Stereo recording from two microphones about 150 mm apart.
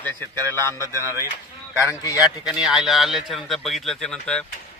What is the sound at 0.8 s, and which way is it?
Speech, 20° right (ahead or behind).